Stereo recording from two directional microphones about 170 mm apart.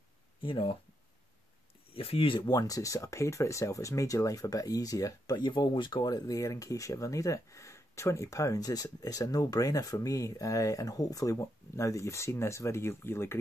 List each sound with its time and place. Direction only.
0.4 s speech: 30° left (ahead or behind)
2.0 s speech: 35° left (ahead or behind); by 13.4 s 15° left (ahead or behind)